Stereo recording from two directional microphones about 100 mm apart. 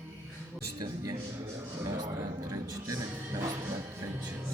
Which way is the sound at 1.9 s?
40° right (ahead or behind).